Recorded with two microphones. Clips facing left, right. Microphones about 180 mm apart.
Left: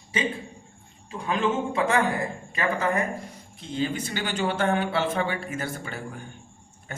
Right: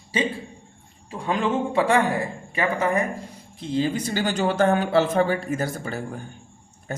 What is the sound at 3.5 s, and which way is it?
Speech, 35° right (ahead or behind).